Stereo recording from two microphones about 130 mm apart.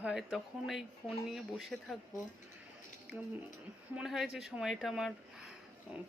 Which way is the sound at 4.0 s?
5° right (ahead or behind).